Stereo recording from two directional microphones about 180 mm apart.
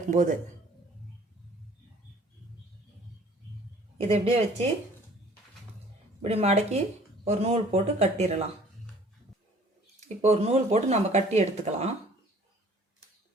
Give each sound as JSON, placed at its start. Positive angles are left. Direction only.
{"t": 0.1, "sound": "speech", "side_deg": -40}
{"t": 4.1, "sound": "speech", "side_deg": -35}
{"t": 6.2, "sound": "speech", "side_deg": -35}
{"t": 10.0, "sound": "speech", "side_deg": -40}